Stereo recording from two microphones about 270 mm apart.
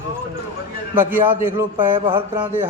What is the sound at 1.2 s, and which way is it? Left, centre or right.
Speech, centre.